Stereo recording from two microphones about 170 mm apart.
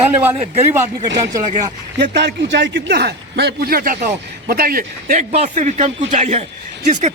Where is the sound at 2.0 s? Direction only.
85° right; by 5.2 s 55° right (ahead or behind).